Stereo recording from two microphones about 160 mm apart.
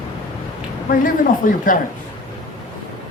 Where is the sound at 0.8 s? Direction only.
60° left (ahead or behind).